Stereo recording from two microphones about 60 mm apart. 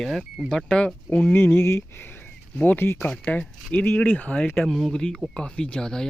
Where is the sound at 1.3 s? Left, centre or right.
Left.